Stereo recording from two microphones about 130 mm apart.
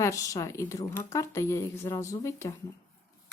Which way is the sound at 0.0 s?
25° left (ahead or behind).